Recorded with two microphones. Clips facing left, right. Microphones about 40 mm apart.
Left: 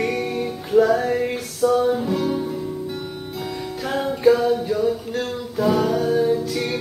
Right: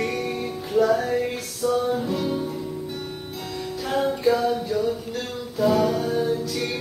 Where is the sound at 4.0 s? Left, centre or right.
Centre.